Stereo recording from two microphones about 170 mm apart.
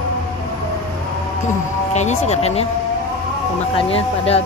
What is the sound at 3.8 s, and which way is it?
Speech, 35° left (ahead or behind).